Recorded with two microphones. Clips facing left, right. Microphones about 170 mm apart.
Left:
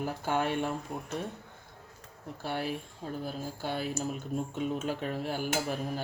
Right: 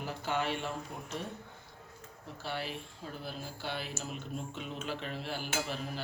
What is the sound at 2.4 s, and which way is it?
Speech, 50° left (ahead or behind).